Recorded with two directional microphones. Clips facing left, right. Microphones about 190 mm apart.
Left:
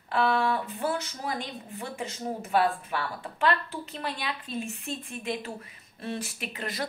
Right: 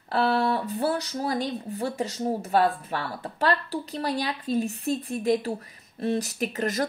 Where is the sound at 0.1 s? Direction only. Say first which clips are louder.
Right 2 dB; 35° right (ahead or behind).